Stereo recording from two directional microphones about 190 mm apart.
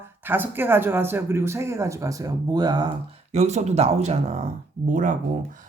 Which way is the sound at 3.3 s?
35° right (ahead or behind).